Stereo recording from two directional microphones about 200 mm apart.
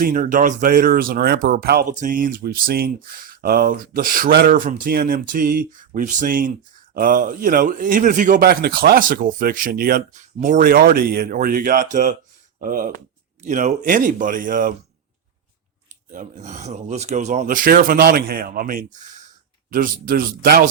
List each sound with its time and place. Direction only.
0.0 s speech: 40° right (ahead or behind)
16.1 s speech: 35° right (ahead or behind)